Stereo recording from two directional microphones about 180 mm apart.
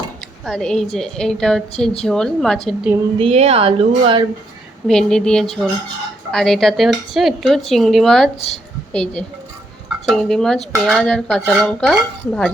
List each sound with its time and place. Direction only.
0.4 s speech: 5° left (ahead or behind)
3.2 s speech: 35° right (ahead or behind)
4.9 s speech: 5° left (ahead or behind)